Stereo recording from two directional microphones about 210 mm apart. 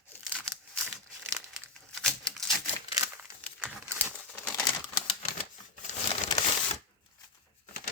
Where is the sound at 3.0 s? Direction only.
10° right (ahead or behind).